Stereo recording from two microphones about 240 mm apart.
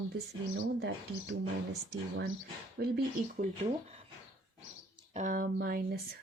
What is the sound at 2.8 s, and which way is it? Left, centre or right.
Speech, right.